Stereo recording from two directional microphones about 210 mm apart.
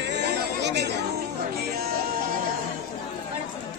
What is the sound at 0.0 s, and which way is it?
Chatter, 55° right (ahead or behind).